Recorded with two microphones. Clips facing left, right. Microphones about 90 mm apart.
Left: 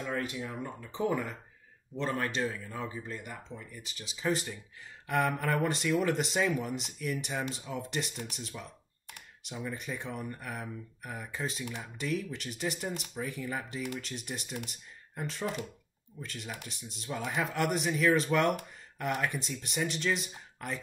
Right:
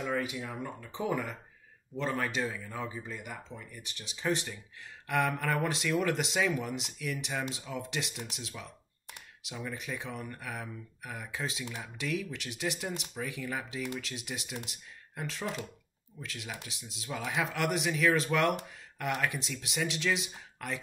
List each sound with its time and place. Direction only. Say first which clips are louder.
0.0 s speech: right 1 dB; 5° right (ahead or behind)